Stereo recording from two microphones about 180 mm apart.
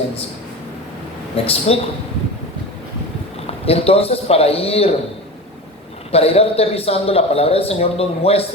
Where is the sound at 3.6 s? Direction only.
35° left (ahead or behind).